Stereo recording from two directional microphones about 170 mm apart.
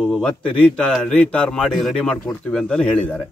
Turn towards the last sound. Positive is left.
turn(degrees=5)  # may be behind; listen again after turning